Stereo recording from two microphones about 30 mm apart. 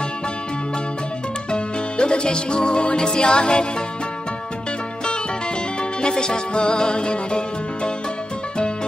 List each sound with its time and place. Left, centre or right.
1.5 s music: left
5.8 s music: left